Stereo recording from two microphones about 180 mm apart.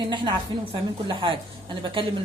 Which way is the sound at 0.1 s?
25° right (ahead or behind).